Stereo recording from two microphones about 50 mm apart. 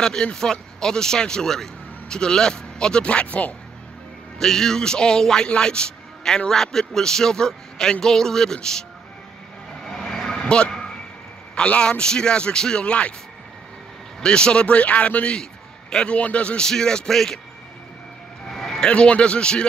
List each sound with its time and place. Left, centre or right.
0.0 s a man's voice: centre
4.4 s a man's voice: centre
9.8 s vehicle: centre
11.5 s a man's voice: left
14.2 s a man's voice: centre
16.6 s a man's voice: centre
18.5 s vehicle: centre
18.9 s a man's voice: left